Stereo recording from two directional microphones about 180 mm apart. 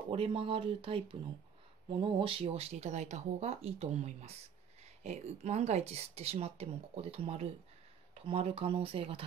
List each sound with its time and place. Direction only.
0.1 s speech: 30° right (ahead or behind)